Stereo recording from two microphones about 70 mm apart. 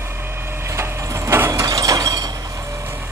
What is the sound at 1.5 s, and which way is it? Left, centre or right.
Mechanisms, right.